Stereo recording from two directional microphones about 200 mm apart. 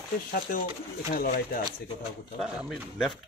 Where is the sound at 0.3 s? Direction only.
40° left (ahead or behind).